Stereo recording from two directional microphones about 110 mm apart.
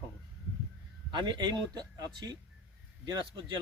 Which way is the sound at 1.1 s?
45° right (ahead or behind).